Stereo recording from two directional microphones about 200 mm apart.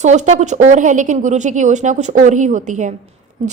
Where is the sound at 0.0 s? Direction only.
35° right (ahead or behind).